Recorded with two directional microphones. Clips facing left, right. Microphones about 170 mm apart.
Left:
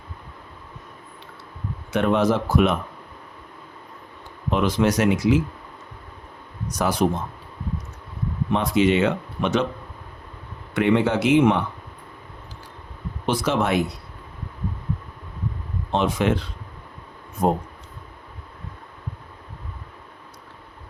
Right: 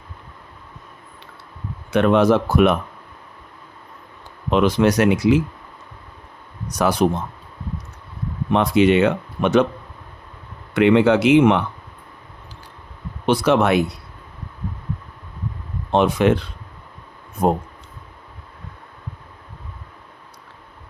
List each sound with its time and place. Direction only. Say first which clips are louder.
1.9 s speech: right 5 dB; 70° right (ahead or behind)
4.5 s speech: right 4 dB; 70° right (ahead or behind)
6.7 s speech: right 4 dB; 70° right (ahead or behind)
8.5 s speech: right 4 dB; 65° right (ahead or behind)
10.8 s speech: right 5 dB; 80° right
13.2 s speech: right 6 dB; 65° right (ahead or behind)
15.9 s speech: right 5 dB; 60° right (ahead or behind)
17.4 s speech: right 2 dB; 65° right (ahead or behind)